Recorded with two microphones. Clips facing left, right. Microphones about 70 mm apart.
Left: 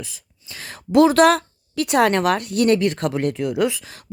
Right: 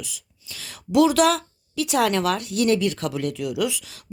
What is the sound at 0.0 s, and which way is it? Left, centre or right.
A woman's voice, left.